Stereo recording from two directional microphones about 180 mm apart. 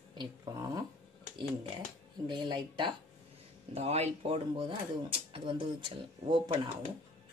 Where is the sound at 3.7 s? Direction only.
35° right (ahead or behind).